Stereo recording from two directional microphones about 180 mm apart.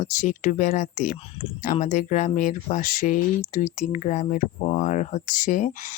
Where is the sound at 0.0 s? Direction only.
40° left (ahead or behind).